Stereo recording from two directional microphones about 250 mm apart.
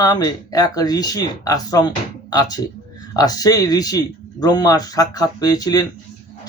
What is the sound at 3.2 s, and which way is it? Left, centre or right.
A man's voice, centre.